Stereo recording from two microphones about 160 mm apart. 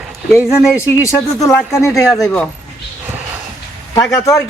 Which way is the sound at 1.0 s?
20° left (ahead or behind).